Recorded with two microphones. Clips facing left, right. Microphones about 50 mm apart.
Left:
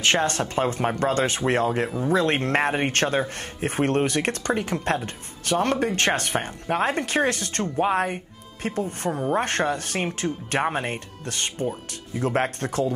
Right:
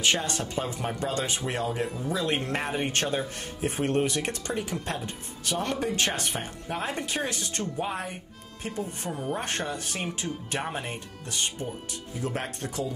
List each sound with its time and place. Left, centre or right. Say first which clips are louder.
0.0 s speech: left 5 dB; left